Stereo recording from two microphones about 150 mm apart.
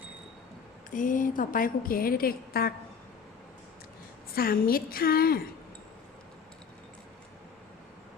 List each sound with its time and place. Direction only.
0.9 s a woman's voice: 60° left (ahead or behind); by 2.7 s 90° left
4.4 s a woman's voice: 75° left (ahead or behind)